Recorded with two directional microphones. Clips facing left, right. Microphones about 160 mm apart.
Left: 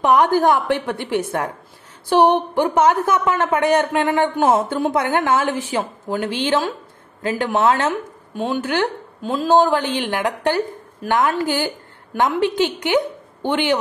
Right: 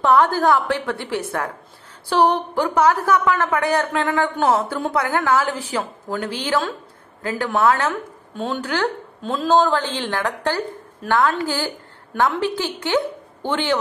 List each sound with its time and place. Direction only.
0.0 s a woman's voice: 15° left (ahead or behind)
9.2 s speech: 5° left (ahead or behind)
9.7 s a woman's voice: 15° left (ahead or behind)